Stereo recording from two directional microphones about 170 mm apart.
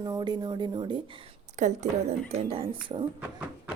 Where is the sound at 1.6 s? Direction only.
45° right (ahead or behind).